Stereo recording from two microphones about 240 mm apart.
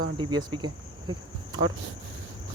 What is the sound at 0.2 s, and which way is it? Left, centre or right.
Speech, centre.